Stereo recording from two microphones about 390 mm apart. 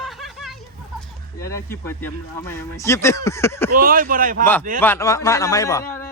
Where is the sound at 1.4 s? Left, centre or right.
Centre.